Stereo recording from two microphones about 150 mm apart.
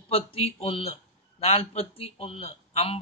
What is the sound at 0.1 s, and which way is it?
A man's voice, 40° left (ahead or behind).